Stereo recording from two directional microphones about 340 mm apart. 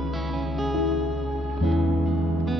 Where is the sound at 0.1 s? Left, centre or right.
Centre.